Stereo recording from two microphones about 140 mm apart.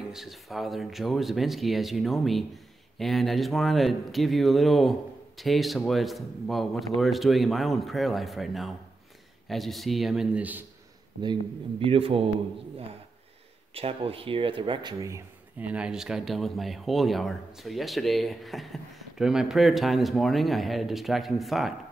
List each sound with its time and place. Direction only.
0.1 s speech: centre (ahead or behind)
11.8 s speech: 40° right (ahead or behind)
13.7 s speech: 45° right (ahead or behind); by 15.2 s 25° right (ahead or behind)
15.6 s speech: 10° right (ahead or behind)